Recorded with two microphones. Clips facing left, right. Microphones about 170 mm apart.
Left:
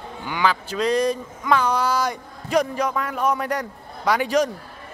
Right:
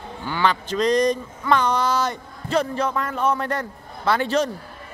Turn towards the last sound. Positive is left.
turn(degrees=10)  # may be behind; listen again after turning